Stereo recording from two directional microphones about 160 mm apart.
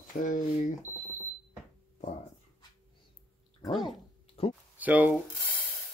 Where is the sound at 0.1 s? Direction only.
55° left (ahead or behind).